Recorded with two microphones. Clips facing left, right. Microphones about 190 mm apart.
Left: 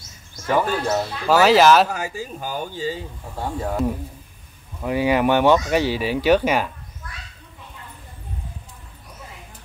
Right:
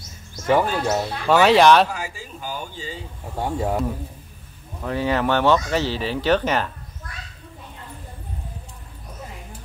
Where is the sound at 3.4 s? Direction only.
15° right (ahead or behind).